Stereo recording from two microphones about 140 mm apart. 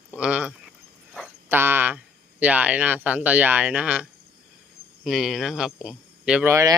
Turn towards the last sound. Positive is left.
turn(degrees=-20)  # may be behind; listen again after turning